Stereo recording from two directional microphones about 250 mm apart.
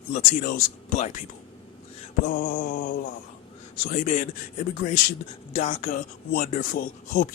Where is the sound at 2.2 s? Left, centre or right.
Left.